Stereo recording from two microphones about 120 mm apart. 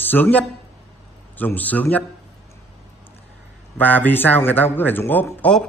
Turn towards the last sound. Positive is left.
turn(degrees=10)  # may be behind; listen again after turning